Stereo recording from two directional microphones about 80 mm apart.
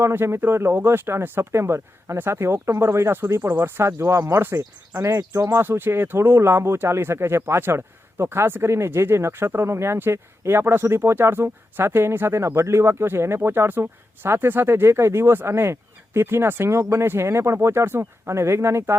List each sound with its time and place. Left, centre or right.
0.0 s speech: right
5.5 s speech: right